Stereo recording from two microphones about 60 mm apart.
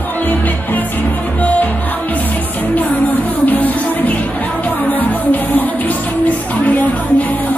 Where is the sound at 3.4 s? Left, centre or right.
Left.